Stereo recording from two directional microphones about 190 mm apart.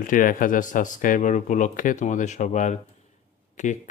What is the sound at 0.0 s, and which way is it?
A man's voice, 45° left (ahead or behind).